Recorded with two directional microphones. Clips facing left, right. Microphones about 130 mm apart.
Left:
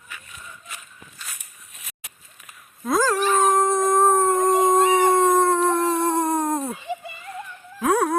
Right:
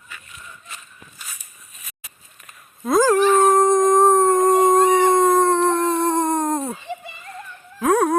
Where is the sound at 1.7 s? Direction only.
75° left (ahead or behind).